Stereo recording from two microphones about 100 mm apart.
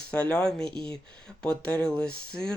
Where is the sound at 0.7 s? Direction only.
55° right (ahead or behind).